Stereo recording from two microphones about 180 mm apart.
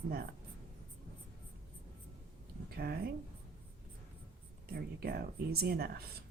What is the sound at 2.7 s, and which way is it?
Speech, 60° right (ahead or behind).